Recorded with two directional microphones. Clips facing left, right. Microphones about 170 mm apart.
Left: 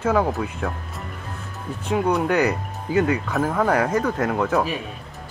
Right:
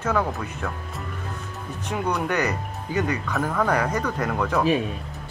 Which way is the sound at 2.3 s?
10° left (ahead or behind).